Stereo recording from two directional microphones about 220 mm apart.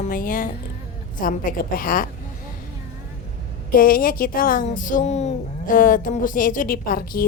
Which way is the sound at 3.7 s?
40° left (ahead or behind).